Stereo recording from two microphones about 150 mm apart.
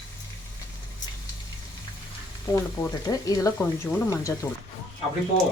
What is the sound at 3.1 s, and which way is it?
Speech, 25° left (ahead or behind).